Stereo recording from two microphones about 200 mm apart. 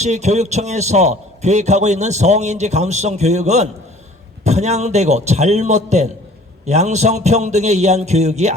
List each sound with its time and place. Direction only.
0.0 s a man's voice: 35° right (ahead or behind)